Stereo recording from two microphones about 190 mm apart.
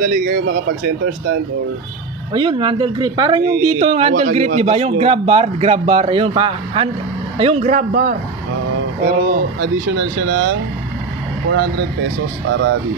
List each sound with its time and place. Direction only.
0.0 s speech: 45° right (ahead or behind)
2.3 s a man's voice: 25° right (ahead or behind); by 12.7 s 75° right (ahead or behind)